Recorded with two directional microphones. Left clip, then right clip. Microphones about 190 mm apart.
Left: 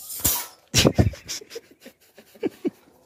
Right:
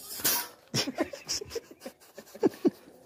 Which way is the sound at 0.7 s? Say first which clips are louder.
Left 11 dB; 40° left (ahead or behind).